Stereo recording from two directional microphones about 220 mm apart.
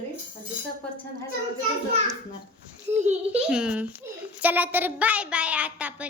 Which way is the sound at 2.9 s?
30° right (ahead or behind).